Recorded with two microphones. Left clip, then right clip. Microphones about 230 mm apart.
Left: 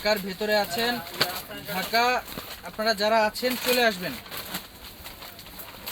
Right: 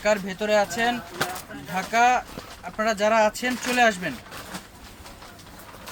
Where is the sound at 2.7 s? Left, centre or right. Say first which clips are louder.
Right 2 dB; centre.